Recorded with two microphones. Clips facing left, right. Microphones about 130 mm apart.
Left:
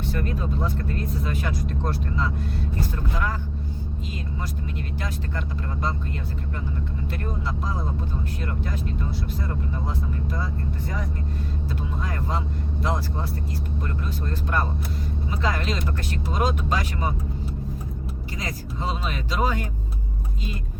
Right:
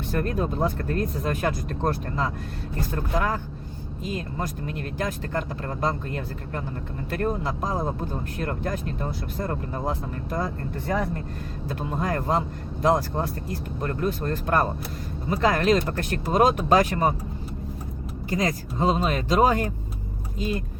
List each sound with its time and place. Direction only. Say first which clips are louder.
0.1 s speech: right 4 dB; 45° right (ahead or behind)
18.3 s speech: right 10 dB; 45° right (ahead or behind)